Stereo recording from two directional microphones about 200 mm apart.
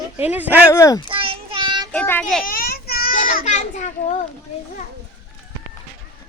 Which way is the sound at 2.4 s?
45° left (ahead or behind).